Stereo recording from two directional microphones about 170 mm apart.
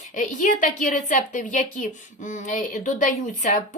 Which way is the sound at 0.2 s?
50° left (ahead or behind).